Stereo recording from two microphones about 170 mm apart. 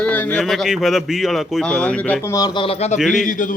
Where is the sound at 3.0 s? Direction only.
Centre (ahead or behind).